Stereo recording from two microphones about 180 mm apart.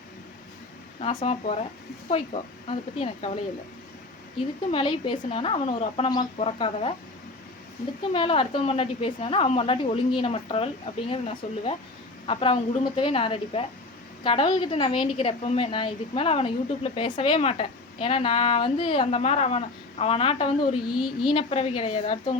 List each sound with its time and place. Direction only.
0.9 s a woman's voice: 35° left (ahead or behind)
4.7 s speech: 30° left (ahead or behind)
8.1 s a woman's voice: 30° left (ahead or behind)